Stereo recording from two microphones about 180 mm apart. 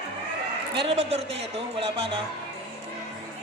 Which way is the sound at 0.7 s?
35° right (ahead or behind).